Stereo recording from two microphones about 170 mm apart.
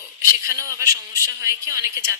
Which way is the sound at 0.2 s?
15° right (ahead or behind).